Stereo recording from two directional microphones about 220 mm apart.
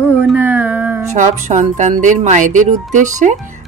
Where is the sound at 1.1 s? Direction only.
35° right (ahead or behind).